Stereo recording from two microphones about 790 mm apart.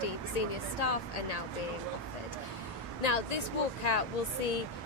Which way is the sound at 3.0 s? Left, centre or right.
Left.